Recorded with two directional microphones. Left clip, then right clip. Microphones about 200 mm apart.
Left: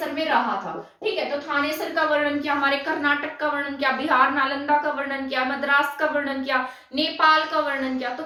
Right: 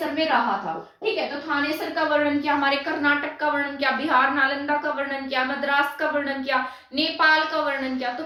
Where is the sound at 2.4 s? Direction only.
5° right (ahead or behind).